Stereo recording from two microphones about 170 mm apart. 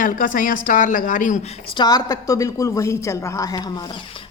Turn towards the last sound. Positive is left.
turn(degrees=30)  # may be behind; listen again after turning